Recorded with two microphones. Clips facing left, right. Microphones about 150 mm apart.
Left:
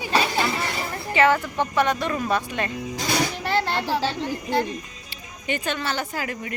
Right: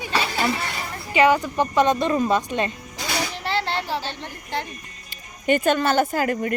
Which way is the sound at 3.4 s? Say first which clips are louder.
Left 1 dB; 45° left (ahead or behind).